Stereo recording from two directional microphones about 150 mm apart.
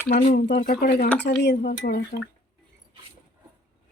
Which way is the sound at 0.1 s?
60° left (ahead or behind).